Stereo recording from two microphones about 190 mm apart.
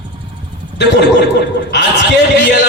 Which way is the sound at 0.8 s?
60° left (ahead or behind).